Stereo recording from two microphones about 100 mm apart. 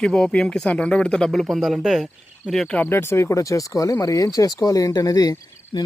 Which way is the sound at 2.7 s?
20° left (ahead or behind).